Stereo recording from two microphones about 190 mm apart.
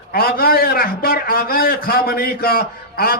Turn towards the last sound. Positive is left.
turn(degrees=50)  # may be behind; listen again after turning